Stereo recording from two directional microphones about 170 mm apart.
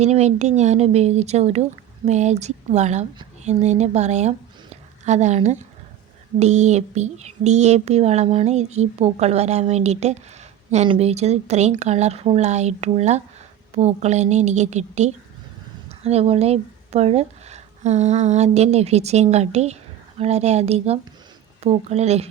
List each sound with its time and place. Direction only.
0.0 s speech: 40° right (ahead or behind)